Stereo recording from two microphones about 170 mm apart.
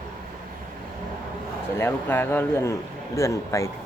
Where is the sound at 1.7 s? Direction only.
10° left (ahead or behind).